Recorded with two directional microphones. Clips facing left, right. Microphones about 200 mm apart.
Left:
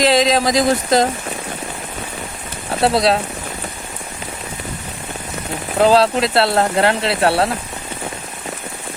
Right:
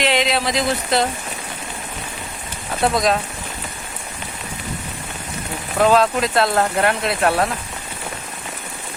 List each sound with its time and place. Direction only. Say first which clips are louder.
0.0 s speech: left 5 dB; 40° left (ahead or behind)
2.8 s speech: left 3 dB; 35° left (ahead or behind)
5.8 s speech: left 2 dB; 35° left (ahead or behind)